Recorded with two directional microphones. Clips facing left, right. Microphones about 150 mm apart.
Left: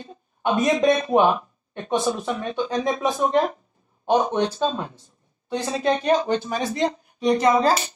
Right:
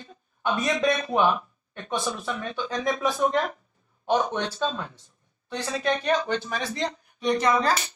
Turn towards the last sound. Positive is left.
turn(degrees=30)  # may be behind; listen again after turning